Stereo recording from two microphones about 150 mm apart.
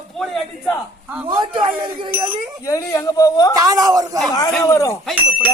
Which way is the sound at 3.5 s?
25° right (ahead or behind).